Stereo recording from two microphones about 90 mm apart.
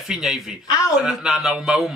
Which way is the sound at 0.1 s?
5° right (ahead or behind).